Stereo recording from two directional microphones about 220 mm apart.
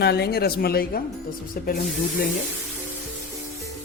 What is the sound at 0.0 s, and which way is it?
Speech, 50° left (ahead or behind).